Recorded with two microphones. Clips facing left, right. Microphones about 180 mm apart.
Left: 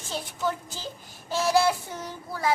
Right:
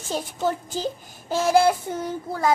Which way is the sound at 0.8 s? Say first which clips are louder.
Right 9 dB; 50° right (ahead or behind).